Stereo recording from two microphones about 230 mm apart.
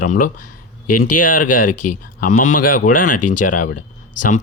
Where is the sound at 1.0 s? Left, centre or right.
Left.